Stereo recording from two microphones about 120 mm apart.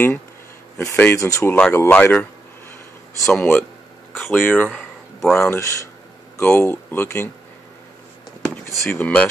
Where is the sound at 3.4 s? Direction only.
20° left (ahead or behind).